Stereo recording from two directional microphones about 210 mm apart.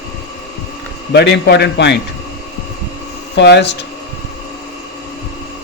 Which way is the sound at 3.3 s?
55° left (ahead or behind).